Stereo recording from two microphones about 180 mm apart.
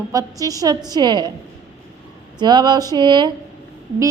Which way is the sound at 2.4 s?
25° right (ahead or behind).